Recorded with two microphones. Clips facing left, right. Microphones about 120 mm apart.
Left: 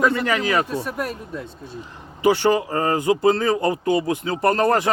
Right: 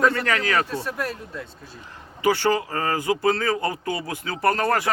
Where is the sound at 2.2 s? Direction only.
20° left (ahead or behind).